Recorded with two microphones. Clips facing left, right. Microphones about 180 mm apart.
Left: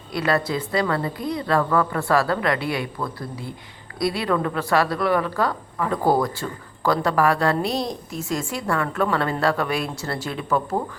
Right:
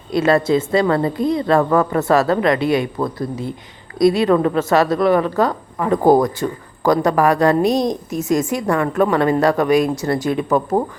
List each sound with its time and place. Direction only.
0.1 s a woman's voice: 25° right (ahead or behind)